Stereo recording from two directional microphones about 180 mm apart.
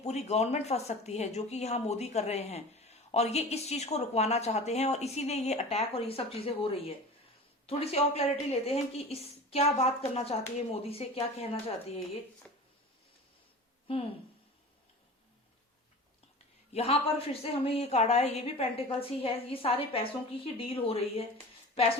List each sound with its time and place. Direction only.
0.0 s speech: 40° left (ahead or behind)
12.4 s a sound: 5° left (ahead or behind)
16.7 s speech: 35° left (ahead or behind)